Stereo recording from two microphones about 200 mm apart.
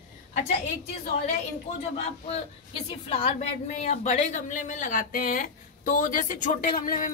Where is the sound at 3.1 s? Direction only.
30° left (ahead or behind).